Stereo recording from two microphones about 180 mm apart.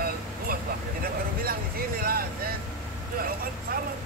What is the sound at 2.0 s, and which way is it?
Speech, 55° right (ahead or behind).